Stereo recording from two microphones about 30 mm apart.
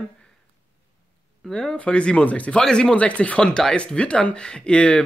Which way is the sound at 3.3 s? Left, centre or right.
Left.